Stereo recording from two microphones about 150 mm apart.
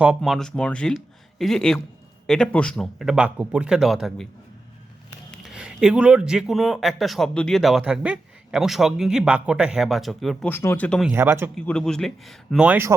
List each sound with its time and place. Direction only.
0.2 s speech: 5° left (ahead or behind)
5.3 s speech: 5° right (ahead or behind)
10.5 s speech: 15° left (ahead or behind)
11.1 s speech: 15° right (ahead or behind)
11.5 s speech: 5° left (ahead or behind)
12.6 s speech: 15° right (ahead or behind)